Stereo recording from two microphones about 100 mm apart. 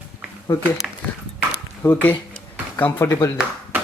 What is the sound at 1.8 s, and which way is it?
Speech, 20° left (ahead or behind).